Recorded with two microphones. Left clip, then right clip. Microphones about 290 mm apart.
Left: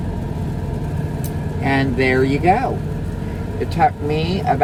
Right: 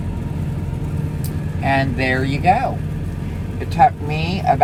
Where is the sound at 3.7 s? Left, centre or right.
Centre.